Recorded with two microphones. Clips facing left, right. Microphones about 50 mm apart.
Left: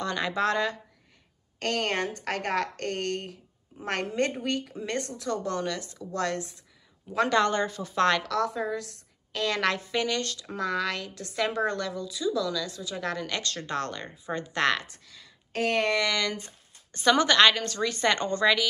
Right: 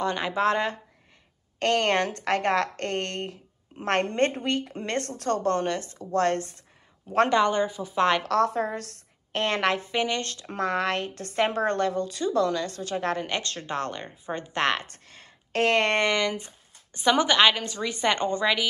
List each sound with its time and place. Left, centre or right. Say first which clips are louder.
0.0 s speech: right 3 dB; right
1.6 s a woman's voice: right 5 dB; right
5.5 s speech: right 5 dB; right
7.2 s a woman's voice: right 2 dB; centre
8.2 s a woman's voice: right 5 dB; right
9.3 s a woman's voice: right 2 dB; right
12.9 s speech: right 4 dB; right
14.9 s speech: right 2 dB; right
16.0 s a woman's voice: right 3 dB; right